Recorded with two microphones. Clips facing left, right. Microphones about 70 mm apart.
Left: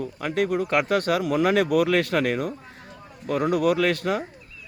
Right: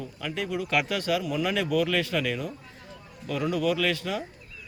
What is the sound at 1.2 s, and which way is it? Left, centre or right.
A man's voice, left.